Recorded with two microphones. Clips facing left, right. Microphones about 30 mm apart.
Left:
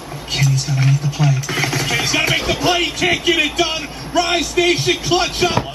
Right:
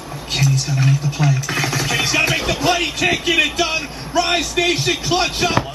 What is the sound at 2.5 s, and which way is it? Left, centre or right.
Speech, left.